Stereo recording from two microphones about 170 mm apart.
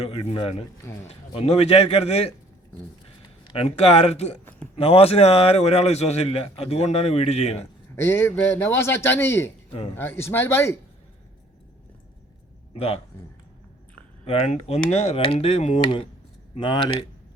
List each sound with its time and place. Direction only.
0.0 s a man's voice: 35° left (ahead or behind)
3.4 s a man's voice: 35° left (ahead or behind)
7.9 s a man's voice: 15° left (ahead or behind)
12.7 s a man's voice: 35° left (ahead or behind)
14.3 s a man's voice: 40° left (ahead or behind)